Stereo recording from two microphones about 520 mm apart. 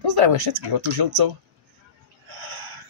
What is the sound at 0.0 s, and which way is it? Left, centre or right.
Speech, right.